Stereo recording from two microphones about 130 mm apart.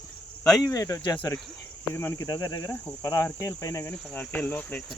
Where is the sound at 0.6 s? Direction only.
25° left (ahead or behind).